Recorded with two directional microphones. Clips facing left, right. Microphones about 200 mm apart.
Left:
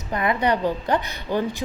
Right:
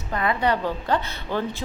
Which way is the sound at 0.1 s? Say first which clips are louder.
Left 1 dB; 20° left (ahead or behind).